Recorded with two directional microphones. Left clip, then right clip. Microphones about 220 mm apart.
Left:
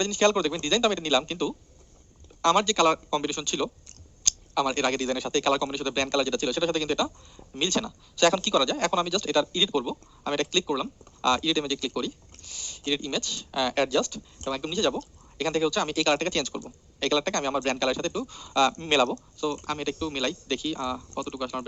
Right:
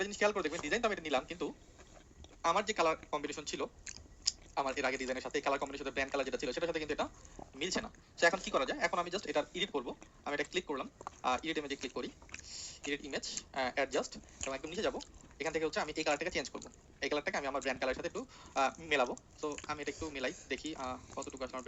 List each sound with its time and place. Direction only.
0.0 s a man's voice: 20° left (ahead or behind)